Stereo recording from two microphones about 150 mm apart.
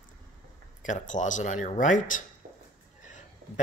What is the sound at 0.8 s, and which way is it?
Speech, 55° left (ahead or behind).